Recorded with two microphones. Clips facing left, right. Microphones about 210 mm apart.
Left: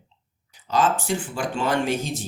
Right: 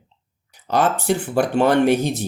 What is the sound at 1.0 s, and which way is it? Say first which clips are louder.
Speech: right 7 dB; 65° right (ahead or behind).